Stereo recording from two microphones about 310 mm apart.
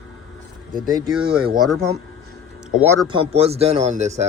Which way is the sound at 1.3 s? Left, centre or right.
Centre.